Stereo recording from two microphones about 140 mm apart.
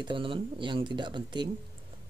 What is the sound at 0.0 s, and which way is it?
A woman's voice, 35° right (ahead or behind).